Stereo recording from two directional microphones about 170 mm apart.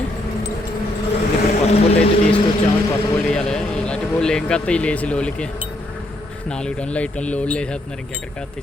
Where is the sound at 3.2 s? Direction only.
5° left (ahead or behind).